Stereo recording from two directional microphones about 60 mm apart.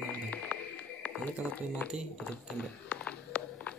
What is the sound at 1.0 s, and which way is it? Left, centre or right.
Speech, left.